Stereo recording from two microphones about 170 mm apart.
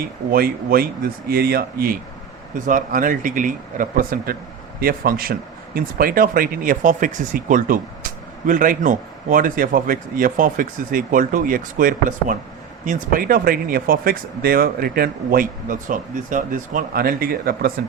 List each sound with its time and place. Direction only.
0.3 s speech: 60° right (ahead or behind)